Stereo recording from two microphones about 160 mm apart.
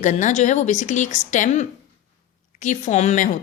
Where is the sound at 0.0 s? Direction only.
50° left (ahead or behind).